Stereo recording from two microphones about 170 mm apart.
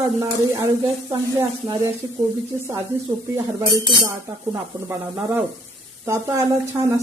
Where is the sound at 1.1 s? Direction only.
15° right (ahead or behind).